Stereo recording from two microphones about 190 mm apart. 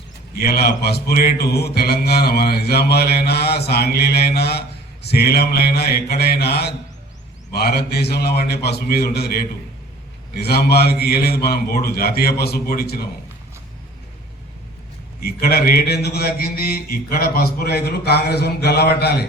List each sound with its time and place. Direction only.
0.3 s speech: 55° left (ahead or behind)
15.2 s speech: 55° left (ahead or behind)